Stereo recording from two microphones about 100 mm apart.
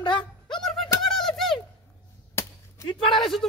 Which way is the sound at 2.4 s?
25° left (ahead or behind).